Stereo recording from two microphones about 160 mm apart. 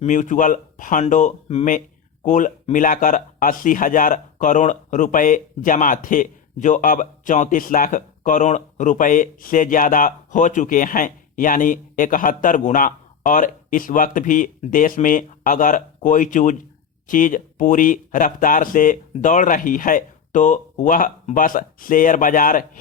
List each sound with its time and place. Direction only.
0.0 s speech: 50° left (ahead or behind)